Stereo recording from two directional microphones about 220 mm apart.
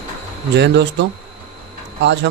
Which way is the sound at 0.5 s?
50° right (ahead or behind).